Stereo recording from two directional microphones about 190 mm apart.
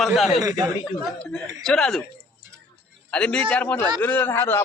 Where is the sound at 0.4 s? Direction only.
20° right (ahead or behind).